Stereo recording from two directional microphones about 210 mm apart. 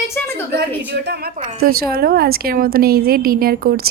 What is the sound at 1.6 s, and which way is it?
A woman's voice, 45° right (ahead or behind).